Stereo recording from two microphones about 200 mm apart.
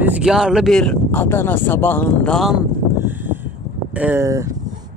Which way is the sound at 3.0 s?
10° right (ahead or behind).